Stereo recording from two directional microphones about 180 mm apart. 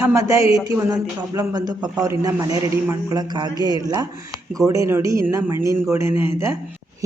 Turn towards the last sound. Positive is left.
turn(degrees=-15)  # may be behind; listen again after turning